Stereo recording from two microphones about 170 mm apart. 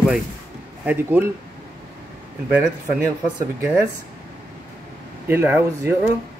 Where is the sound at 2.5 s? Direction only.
10° right (ahead or behind).